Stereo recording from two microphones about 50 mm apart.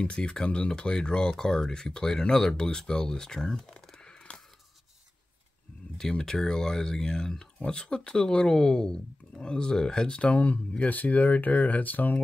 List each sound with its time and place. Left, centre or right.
0.0 s speech: centre
5.9 s speech: centre; by 12.2 s left